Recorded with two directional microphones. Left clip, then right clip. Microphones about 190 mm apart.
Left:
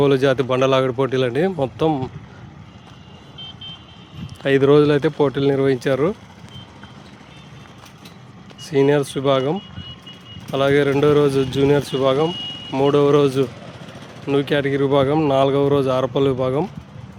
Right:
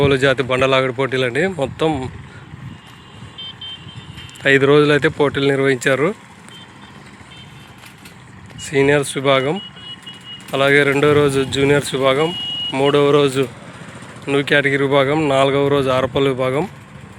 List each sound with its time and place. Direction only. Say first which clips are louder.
0.0 s speech: right 1 dB; 15° left (ahead or behind)
4.4 s speech: right 2 dB; 10° left (ahead or behind)
8.7 s speech: right 2 dB; 10° left (ahead or behind)